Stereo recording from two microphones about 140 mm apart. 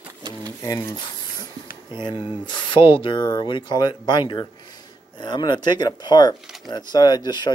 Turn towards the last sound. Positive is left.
turn(degrees=30)  # may be behind; listen again after turning